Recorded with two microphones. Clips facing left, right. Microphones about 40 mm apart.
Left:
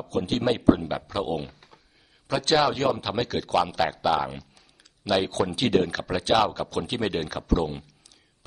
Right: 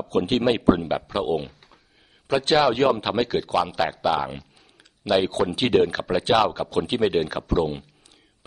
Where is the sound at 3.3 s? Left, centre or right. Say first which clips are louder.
Right 1 dB; centre.